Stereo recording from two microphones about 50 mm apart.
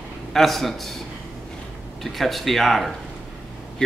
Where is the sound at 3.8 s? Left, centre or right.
Centre.